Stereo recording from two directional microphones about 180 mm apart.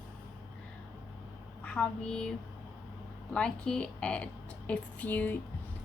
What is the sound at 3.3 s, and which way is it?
A woman's voice, 5° left (ahead or behind).